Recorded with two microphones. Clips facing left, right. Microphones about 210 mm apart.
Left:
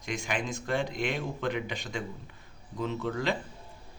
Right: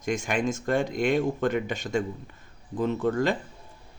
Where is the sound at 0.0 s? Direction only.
50° right (ahead or behind).